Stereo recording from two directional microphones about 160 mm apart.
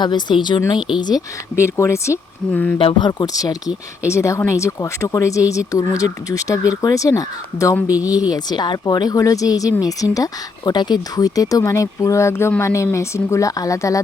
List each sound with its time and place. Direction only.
0.0 s speech: 30° left (ahead or behind); by 2.7 s 10° left (ahead or behind)
2.7 s speech: 30° left (ahead or behind)
7.9 s speech: 10° right (ahead or behind)
8.3 s speech: 25° left (ahead or behind)